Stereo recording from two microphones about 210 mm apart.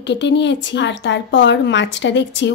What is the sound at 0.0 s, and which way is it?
Speech, 60° left (ahead or behind).